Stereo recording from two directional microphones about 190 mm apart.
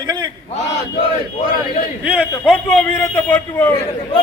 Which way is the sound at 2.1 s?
5° right (ahead or behind).